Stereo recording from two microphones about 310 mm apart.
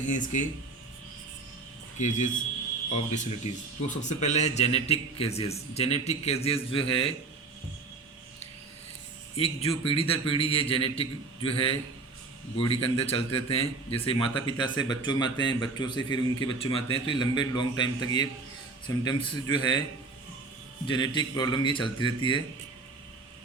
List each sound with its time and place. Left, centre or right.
2.0 s a man's voice: left
9.4 s a man's voice: centre
12.8 s a man's voice: centre
20.8 s a man's voice: centre